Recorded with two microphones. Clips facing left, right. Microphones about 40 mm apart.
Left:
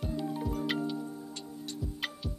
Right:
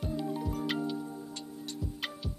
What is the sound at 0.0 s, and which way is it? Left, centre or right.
Music, centre.